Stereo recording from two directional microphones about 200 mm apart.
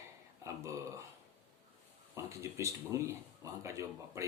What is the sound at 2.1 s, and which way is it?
Speech, 15° right (ahead or behind).